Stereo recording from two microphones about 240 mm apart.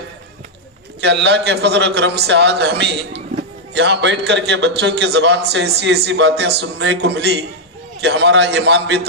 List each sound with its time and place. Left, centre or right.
1.0 s a man's voice: right